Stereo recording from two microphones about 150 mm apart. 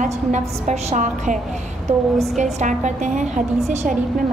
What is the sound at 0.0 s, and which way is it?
A woman's voice, 50° right (ahead or behind).